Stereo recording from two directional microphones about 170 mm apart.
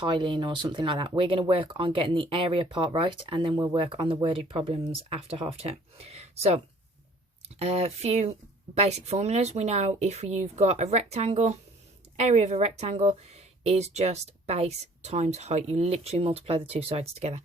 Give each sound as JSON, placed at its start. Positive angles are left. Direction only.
{"t": 0.0, "sound": "speech", "side_deg": -30}